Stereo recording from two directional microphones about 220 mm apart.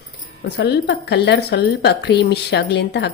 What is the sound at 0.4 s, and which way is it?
A woman's voice, 50° left (ahead or behind).